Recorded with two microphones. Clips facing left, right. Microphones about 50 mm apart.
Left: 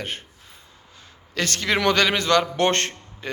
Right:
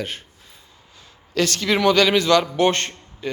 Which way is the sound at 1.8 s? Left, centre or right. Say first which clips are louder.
Right 5 dB; left.